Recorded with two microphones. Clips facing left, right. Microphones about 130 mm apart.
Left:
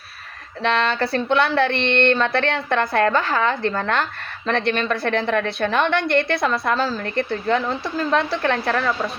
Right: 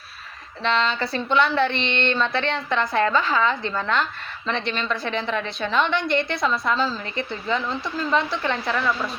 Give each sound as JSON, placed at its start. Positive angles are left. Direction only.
{"t": 0.6, "sound": "a woman's voice", "side_deg": 55}